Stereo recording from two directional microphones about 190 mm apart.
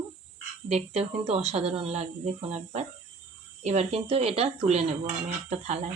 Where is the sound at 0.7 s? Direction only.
35° right (ahead or behind).